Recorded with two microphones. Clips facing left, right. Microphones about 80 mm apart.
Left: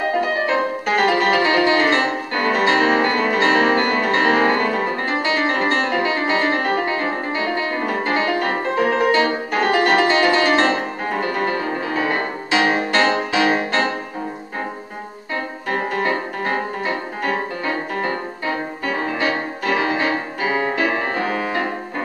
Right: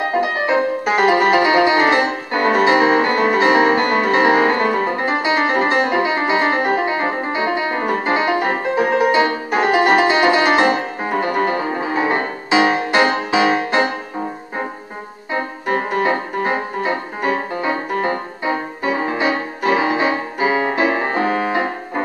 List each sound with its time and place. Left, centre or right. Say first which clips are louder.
0.5 s music: right 3 dB; centre
15.3 s music: right 4 dB; centre